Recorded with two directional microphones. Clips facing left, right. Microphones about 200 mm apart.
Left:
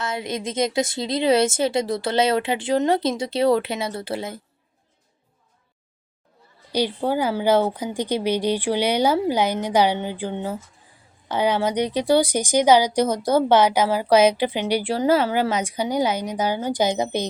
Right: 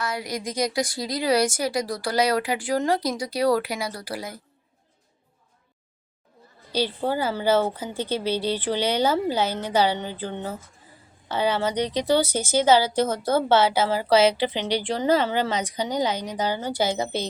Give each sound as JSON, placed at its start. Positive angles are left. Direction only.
{"t": 0.0, "sound": "a woman's voice", "side_deg": 25}
{"t": 6.7, "sound": "a woman's voice", "side_deg": 15}